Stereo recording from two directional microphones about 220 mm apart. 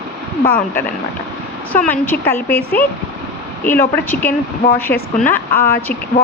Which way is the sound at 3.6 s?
10° left (ahead or behind).